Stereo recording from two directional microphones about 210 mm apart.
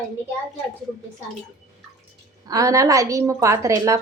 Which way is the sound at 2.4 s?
15° right (ahead or behind).